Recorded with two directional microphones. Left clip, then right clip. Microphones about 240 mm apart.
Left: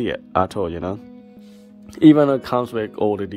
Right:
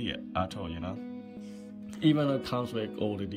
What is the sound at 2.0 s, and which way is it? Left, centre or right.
Speech, centre.